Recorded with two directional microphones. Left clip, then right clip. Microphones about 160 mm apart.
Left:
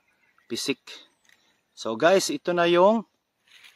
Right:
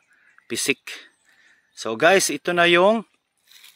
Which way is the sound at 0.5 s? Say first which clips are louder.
Right 5 dB; 15° right (ahead or behind).